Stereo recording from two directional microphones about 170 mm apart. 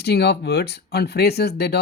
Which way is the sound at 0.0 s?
75° left (ahead or behind).